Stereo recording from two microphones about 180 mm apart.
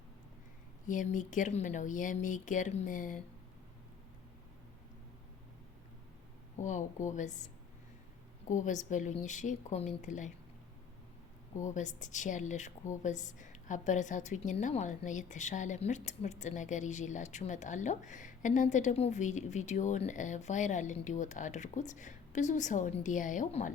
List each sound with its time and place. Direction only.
0.9 s a woman's voice: 45° left (ahead or behind)
6.6 s a woman's voice: 45° left (ahead or behind)
8.4 s a woman's voice: 45° left (ahead or behind)
11.5 s a woman's voice: 45° left (ahead or behind)